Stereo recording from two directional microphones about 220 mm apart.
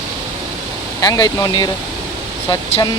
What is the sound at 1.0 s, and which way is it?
Speech, 15° left (ahead or behind).